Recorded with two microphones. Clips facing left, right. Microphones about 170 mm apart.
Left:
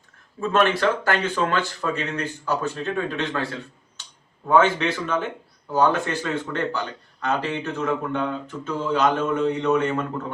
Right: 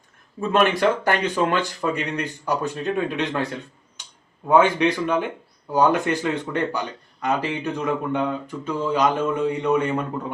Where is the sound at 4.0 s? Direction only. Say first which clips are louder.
Right 1 dB; 15° right (ahead or behind).